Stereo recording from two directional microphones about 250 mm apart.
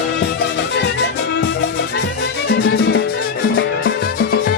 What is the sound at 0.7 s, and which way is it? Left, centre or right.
Music, left.